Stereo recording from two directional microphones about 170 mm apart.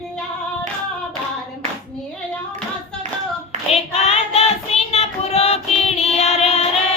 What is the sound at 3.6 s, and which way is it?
Child singing, 35° left (ahead or behind).